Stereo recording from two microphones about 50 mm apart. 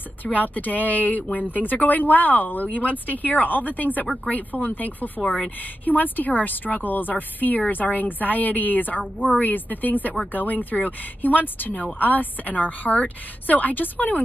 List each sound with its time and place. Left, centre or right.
0.2 s speech: left